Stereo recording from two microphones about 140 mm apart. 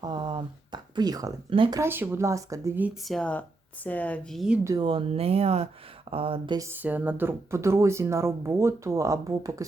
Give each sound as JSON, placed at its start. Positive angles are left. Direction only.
{"t": 0.0, "sound": "speech", "side_deg": -30}
{"t": 1.8, "sound": "speech", "side_deg": -15}
{"t": 3.0, "sound": "speech", "side_deg": 5}
{"t": 4.6, "sound": "speech", "side_deg": -25}
{"t": 4.9, "sound": "speech", "side_deg": -40}
{"t": 6.6, "sound": "speech", "side_deg": -15}